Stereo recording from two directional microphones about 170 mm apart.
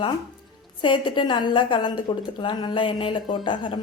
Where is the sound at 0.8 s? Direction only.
25° left (ahead or behind).